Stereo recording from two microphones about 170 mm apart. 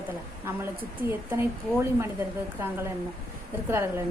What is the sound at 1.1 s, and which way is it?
A woman's voice, 15° right (ahead or behind).